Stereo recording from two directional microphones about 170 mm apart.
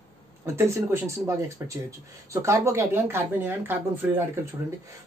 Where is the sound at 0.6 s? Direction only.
15° right (ahead or behind).